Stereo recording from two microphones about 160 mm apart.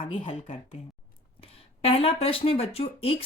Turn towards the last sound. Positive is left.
turn(degrees=35)  # may be behind; listen again after turning